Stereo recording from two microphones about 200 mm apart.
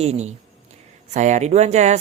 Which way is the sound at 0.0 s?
35° right (ahead or behind).